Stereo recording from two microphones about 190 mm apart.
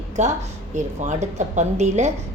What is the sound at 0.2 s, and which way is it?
A woman's voice, 40° right (ahead or behind).